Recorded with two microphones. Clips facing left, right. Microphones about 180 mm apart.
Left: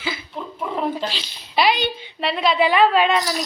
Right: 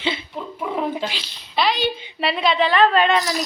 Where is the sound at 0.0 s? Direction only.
25° right (ahead or behind).